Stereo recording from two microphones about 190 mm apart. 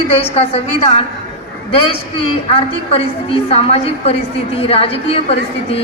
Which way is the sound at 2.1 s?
30° left (ahead or behind).